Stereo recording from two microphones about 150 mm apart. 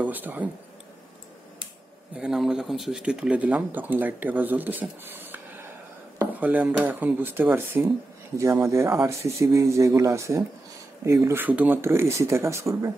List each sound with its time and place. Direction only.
0.0 s speech: 10° right (ahead or behind)
2.1 s speech: 5° right (ahead or behind)